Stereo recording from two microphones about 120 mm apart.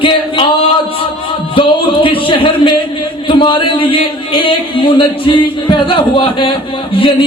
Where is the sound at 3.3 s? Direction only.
45° left (ahead or behind).